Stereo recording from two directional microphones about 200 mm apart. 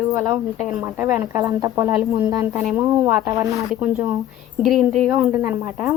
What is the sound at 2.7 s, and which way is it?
Speech, 15° right (ahead or behind).